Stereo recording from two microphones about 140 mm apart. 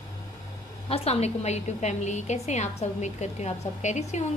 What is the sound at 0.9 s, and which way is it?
A woman's voice, 45° left (ahead or behind).